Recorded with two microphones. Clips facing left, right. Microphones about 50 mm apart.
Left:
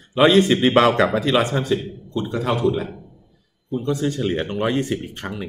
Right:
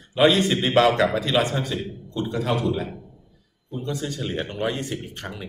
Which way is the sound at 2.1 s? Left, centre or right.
Centre.